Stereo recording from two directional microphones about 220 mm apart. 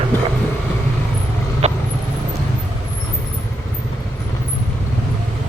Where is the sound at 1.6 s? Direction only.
30° right (ahead or behind).